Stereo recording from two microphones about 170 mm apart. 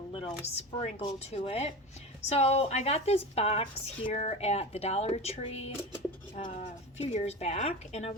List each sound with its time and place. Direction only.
0.1 s speech: 35° left (ahead or behind)
6.3 s speech: 45° left (ahead or behind)